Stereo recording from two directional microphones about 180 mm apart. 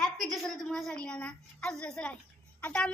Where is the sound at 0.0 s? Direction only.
Centre (ahead or behind).